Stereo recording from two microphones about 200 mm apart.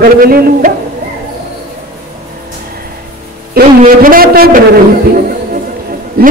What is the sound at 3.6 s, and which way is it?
Speech, 45° right (ahead or behind).